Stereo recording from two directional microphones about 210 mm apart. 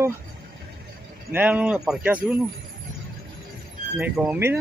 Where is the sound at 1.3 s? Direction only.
10° right (ahead or behind).